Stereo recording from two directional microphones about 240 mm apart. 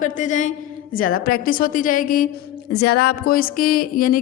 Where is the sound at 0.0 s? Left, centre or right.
Left.